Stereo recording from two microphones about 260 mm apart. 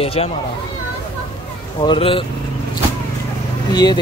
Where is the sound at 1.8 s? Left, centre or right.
Centre.